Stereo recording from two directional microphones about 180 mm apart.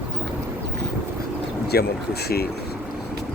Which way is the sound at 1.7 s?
60° left (ahead or behind).